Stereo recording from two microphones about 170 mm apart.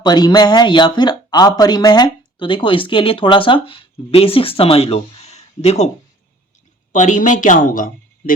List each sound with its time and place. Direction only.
0.0 s speech: 25° left (ahead or behind); by 5.9 s 40° left (ahead or behind)
6.9 s a woman's voice: 45° left (ahead or behind)